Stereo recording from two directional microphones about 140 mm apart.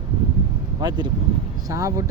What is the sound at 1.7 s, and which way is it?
Speech, 20° right (ahead or behind).